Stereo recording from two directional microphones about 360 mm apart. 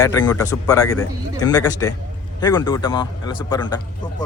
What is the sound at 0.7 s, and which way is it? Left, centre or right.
Speech, left.